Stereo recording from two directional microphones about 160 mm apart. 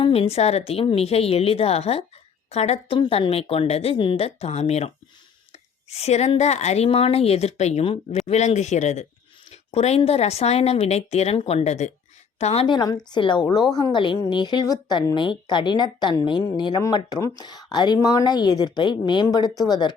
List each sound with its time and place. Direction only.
0.0 s speech: 40° left (ahead or behind)
5.9 s a woman's voice: 40° left (ahead or behind)
12.6 s speech: 25° left (ahead or behind)